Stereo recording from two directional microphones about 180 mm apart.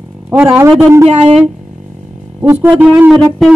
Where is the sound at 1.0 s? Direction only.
35° right (ahead or behind).